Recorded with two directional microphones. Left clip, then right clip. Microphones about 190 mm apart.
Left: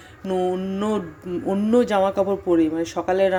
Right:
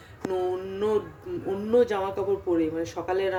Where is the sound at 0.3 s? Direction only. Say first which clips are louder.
Left 5 dB; 35° left (ahead or behind).